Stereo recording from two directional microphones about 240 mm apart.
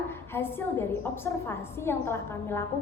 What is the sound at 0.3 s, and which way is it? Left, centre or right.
A woman's voice, centre.